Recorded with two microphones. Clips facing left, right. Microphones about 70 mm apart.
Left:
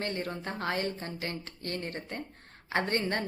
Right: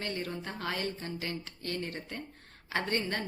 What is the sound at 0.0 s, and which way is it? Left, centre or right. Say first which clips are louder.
A woman's voice: left 2 dB; left.